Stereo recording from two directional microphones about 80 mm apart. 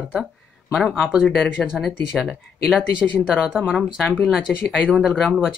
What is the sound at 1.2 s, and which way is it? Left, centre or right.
Speech, left.